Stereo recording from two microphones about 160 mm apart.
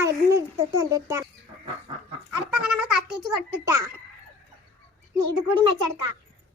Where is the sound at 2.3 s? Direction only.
10° right (ahead or behind).